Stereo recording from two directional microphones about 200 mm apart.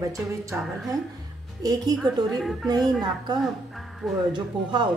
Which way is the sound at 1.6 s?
20° right (ahead or behind).